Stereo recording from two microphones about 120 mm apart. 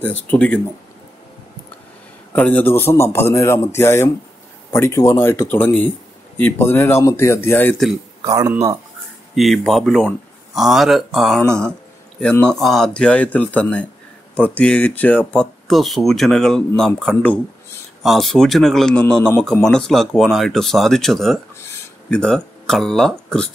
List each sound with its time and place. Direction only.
0.0 s speech: 15° left (ahead or behind)
2.3 s a man's voice: 15° left (ahead or behind)
8.2 s speech: 30° right (ahead or behind)
9.3 s speech: centre (ahead or behind)
15.7 s speech: centre (ahead or behind)